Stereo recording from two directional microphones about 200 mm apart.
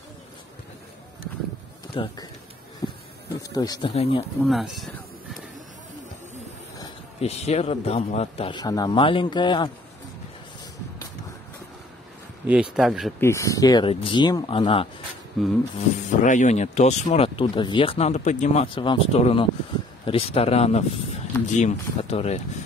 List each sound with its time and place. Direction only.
2.0 s a man's voice: 25° left (ahead or behind)
2.8 s a sound: 15° left (ahead or behind)
3.3 s a man's voice: 20° left (ahead or behind)
3.9 s speech: 30° left (ahead or behind)
4.4 s speech: centre (ahead or behind)
7.2 s a man's voice: 30° left (ahead or behind)
12.4 s speech: 5° right (ahead or behind)
13.2 s a man's voice: 15° left (ahead or behind)
15.4 s speech: centre (ahead or behind)
16.2 s a man's voice: 40° left (ahead or behind)